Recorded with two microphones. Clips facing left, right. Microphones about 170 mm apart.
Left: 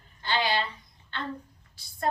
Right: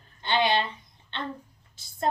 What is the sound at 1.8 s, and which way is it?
Speech, 25° right (ahead or behind).